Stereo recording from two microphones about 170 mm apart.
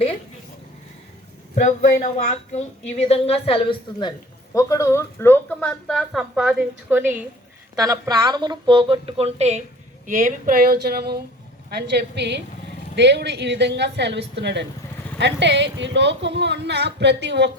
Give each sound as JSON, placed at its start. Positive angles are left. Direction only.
{"t": 1.6, "sound": "a woman's voice", "side_deg": 45}
{"t": 7.8, "sound": "a woman's voice", "side_deg": -20}
{"t": 10.1, "sound": "a woman's voice", "side_deg": -55}